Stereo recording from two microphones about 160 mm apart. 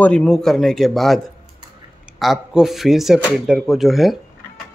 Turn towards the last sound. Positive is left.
turn(degrees=0)  # may be behind; listen again after turning